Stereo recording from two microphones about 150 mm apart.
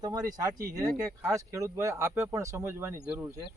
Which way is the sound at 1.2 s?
20° right (ahead or behind).